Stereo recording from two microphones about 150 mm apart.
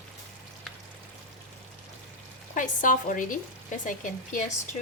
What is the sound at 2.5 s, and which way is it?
A woman's voice, 60° left (ahead or behind).